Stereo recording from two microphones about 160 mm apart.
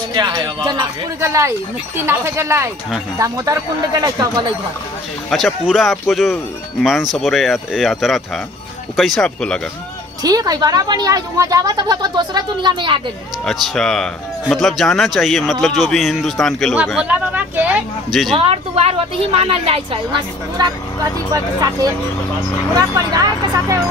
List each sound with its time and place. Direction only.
0.1 s speech: 25° right (ahead or behind)
5.3 s speech: centre (ahead or behind)
10.2 s speech: 25° right (ahead or behind)
13.5 s speech: centre (ahead or behind)
18.3 s speech: 35° right (ahead or behind)